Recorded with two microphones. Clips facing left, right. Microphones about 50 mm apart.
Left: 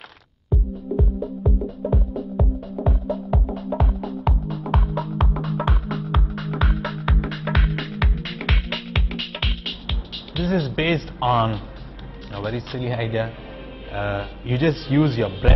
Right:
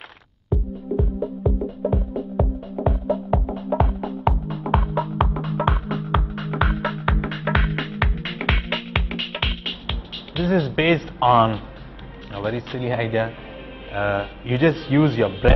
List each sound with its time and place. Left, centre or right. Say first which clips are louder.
0.5 s music: right 1 dB; centre
11.1 s a man's voice: right 5 dB; centre